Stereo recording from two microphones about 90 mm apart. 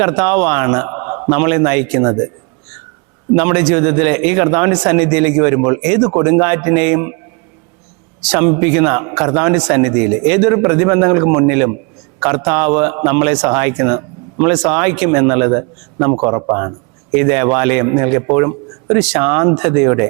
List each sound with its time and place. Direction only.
0.0 s speech: 15° right (ahead or behind)
3.3 s speech: 15° right (ahead or behind)
8.3 s speech: 15° right (ahead or behind)